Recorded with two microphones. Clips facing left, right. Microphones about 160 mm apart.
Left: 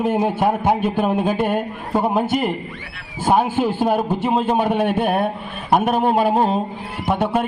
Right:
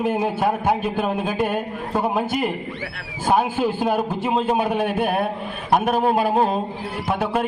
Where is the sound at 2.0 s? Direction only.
25° left (ahead or behind).